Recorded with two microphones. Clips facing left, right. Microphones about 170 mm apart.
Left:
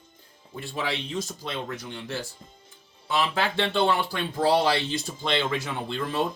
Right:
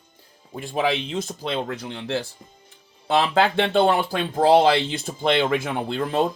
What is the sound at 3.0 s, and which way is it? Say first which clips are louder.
Speech: right 7 dB; 60° right (ahead or behind).